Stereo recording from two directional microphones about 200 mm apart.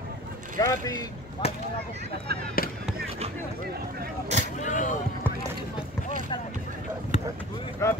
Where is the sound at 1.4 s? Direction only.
30° left (ahead or behind).